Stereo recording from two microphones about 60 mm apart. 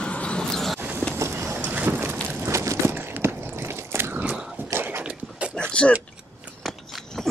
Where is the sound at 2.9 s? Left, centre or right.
Right.